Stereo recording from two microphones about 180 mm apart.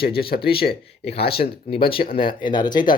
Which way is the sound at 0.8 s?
35° left (ahead or behind).